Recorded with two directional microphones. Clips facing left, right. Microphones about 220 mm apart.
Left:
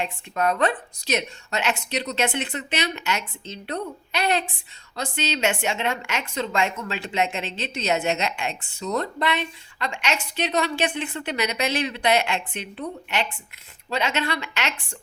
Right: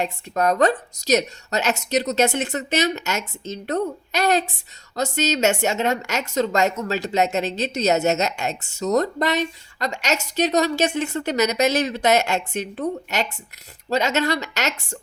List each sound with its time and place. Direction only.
0.0 s a woman's voice: 40° right (ahead or behind)